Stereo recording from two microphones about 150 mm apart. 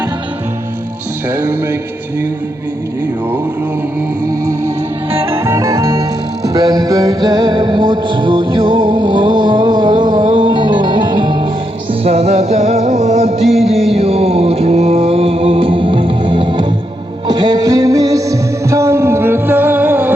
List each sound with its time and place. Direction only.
1.3 s music: 10° right (ahead or behind)
4.3 s music: 15° right (ahead or behind)
12.0 s music: 45° right (ahead or behind)
13.9 s mantra: 45° right (ahead or behind)
17.2 s music: 25° right (ahead or behind)